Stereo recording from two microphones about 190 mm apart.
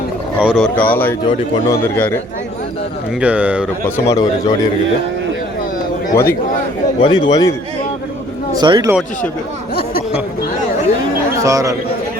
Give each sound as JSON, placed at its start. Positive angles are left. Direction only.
{"t": 0.3, "sound": "a man's voice", "side_deg": 0}
{"t": 3.2, "sound": "speech", "side_deg": -5}
{"t": 3.8, "sound": "speech", "side_deg": 20}
{"t": 6.1, "sound": "a man's voice", "side_deg": 15}
{"t": 8.5, "sound": "speech", "side_deg": -20}
{"t": 11.4, "sound": "speech", "side_deg": -15}